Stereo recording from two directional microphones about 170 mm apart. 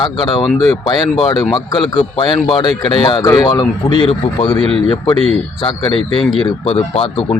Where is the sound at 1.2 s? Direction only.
25° left (ahead or behind).